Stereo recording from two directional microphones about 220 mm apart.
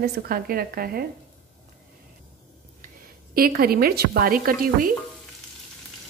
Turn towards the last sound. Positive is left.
turn(degrees=-40)  # may be behind; listen again after turning